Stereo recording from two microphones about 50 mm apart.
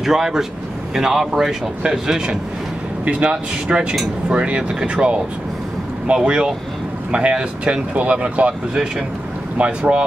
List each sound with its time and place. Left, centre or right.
0.0 s speech: centre
3.1 s speech: right
3.7 s speech: centre
9.6 s speech: right